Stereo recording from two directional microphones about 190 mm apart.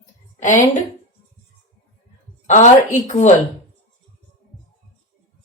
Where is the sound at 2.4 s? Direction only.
40° left (ahead or behind).